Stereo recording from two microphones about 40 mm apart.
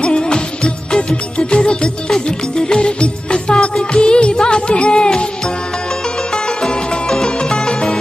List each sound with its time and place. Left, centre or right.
0.0 s music: left
1.5 s music: left
6.3 s music: centre